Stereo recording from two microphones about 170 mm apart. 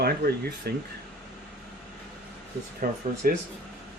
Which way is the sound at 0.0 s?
70° right (ahead or behind).